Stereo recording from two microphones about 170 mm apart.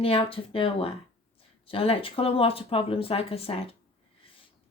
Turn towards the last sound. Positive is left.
turn(degrees=35)  # may be behind; listen again after turning